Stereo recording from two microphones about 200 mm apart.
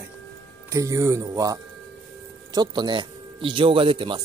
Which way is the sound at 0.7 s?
15° right (ahead or behind).